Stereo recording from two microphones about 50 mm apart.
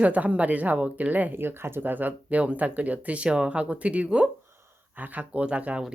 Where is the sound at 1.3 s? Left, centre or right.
Right; by 4.3 s centre.